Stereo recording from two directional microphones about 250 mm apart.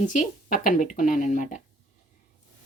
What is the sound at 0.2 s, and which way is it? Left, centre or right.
Speech, left.